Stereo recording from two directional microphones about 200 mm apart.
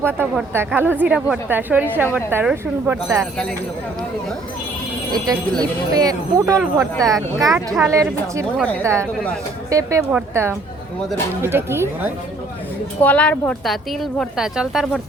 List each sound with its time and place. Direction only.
0.0 s a woman's voice: 10° right (ahead or behind)
5.1 s a woman's voice: 20° right (ahead or behind)
8.5 s a woman's voice: 5° left (ahead or behind)
8.8 s a woman's voice: 15° right (ahead or behind)
13.0 s speech: 5° left (ahead or behind)